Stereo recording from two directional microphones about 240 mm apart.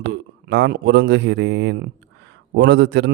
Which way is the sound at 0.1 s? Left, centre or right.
Right.